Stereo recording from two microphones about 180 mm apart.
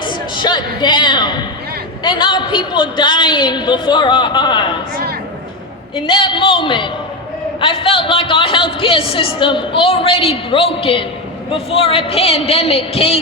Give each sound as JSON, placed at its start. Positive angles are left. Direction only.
{"t": 0.0, "sound": "a man's voice", "side_deg": 25}
{"t": 6.1, "sound": "a man's voice", "side_deg": 30}